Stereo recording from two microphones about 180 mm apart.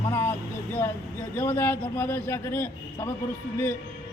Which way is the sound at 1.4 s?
10° left (ahead or behind).